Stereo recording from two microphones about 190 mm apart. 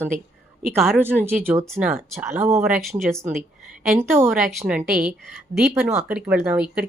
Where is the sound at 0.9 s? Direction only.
10° right (ahead or behind).